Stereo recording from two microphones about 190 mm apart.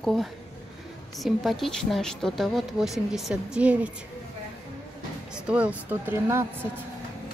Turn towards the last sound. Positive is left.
turn(degrees=-15)  # may be behind; listen again after turning